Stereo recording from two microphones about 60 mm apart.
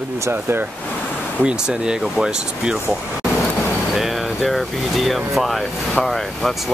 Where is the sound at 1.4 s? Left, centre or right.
Centre.